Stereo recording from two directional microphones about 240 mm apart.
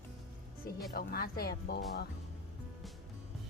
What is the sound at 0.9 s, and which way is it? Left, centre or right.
Speech, left.